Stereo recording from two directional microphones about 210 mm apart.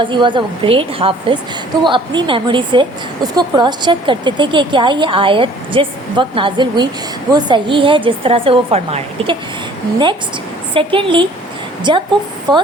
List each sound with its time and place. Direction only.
0.0 s speech: 20° right (ahead or behind)
10.8 s speech: 25° right (ahead or behind)